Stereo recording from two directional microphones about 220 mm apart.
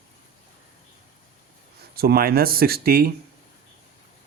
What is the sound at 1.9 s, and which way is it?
Speech, 45° right (ahead or behind).